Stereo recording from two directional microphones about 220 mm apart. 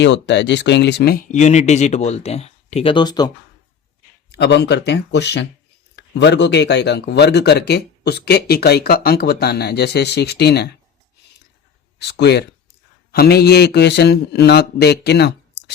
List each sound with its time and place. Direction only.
0.0 s speech: 50° left (ahead or behind)
1.3 s speech: 30° left (ahead or behind)
4.3 s speech: 50° left (ahead or behind)
11.9 s speech: 50° left (ahead or behind)